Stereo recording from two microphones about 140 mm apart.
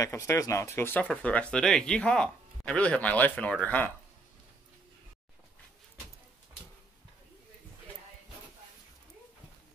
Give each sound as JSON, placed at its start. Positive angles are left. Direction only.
{"t": 0.0, "sound": "speech", "side_deg": 20}